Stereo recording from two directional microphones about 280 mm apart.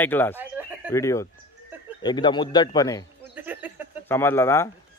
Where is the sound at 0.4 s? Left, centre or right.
Centre.